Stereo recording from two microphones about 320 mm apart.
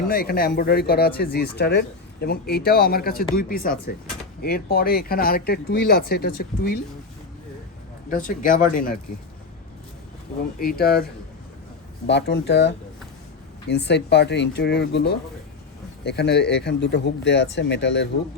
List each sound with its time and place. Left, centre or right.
0.1 s speech: left
8.1 s speech: left
10.6 s speech: left